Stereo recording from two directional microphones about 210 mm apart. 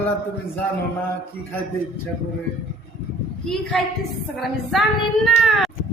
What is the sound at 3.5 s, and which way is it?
A woman's voice, 5° left (ahead or behind).